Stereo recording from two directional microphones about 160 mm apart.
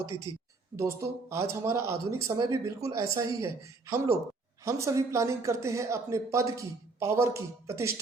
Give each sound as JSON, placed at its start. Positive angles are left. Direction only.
{"t": 0.8, "sound": "speech", "side_deg": -15}